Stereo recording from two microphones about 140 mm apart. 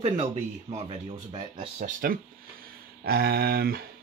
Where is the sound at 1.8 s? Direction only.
90° right.